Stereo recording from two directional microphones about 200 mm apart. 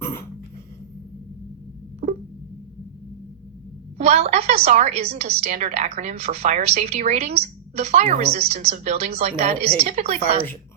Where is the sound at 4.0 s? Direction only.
30° right (ahead or behind).